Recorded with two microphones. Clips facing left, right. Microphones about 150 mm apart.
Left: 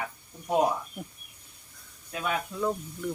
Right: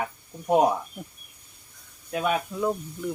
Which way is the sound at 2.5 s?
10° right (ahead or behind).